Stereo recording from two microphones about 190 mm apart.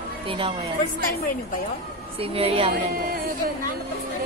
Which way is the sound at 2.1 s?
30° right (ahead or behind).